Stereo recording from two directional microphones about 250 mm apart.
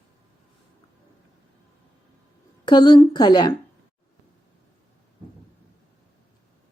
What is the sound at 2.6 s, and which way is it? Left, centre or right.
Speech, centre.